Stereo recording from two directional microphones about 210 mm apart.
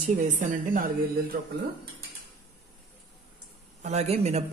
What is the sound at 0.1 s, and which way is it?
Speech, 35° right (ahead or behind).